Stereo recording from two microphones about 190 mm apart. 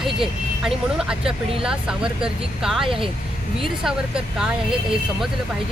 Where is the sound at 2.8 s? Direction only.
30° right (ahead or behind).